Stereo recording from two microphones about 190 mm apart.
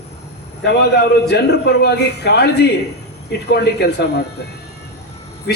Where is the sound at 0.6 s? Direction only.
60° left (ahead or behind).